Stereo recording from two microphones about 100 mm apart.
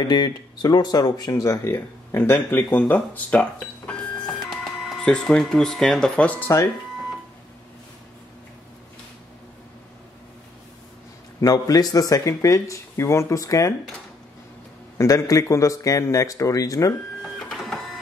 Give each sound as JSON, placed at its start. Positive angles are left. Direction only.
{"t": 0.1, "sound": "speech", "side_deg": 45}
{"t": 4.5, "sound": "speech", "side_deg": 0}
{"t": 11.4, "sound": "speech", "side_deg": 35}
{"t": 15.0, "sound": "speech", "side_deg": 35}
{"t": 17.2, "sound": "printer", "side_deg": 5}